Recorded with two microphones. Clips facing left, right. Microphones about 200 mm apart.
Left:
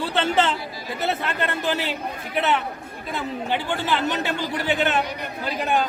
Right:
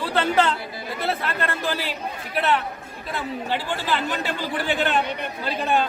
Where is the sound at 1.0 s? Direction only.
20° left (ahead or behind).